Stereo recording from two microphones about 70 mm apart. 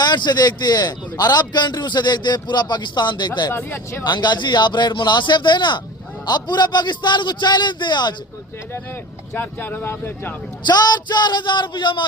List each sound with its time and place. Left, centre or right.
0.0 s a man's voice: left
3.5 s speech: left
4.0 s a man's voice: left
9.4 s speech: left
10.7 s a man's voice: left